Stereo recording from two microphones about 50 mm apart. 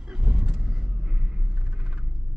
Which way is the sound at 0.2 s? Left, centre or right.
Centre.